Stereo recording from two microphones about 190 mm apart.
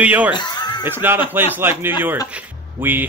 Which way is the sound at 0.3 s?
20° left (ahead or behind).